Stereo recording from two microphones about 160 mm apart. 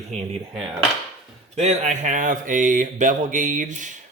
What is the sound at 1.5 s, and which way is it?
Speech, 40° right (ahead or behind).